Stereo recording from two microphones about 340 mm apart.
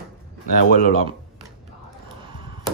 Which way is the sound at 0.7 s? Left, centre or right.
Left.